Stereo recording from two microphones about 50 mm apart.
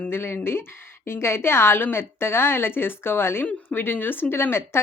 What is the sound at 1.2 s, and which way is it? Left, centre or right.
A woman's voice, left.